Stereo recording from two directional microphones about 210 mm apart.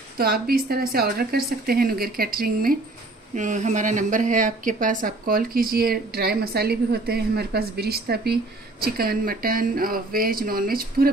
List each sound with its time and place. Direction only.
0.2 s a woman's voice: 45° right (ahead or behind)